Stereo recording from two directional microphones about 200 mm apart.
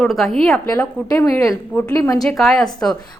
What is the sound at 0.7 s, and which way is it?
A woman's voice, 15° left (ahead or behind).